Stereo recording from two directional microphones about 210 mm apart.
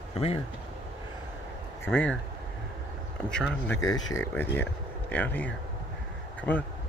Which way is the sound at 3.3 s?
5° left (ahead or behind).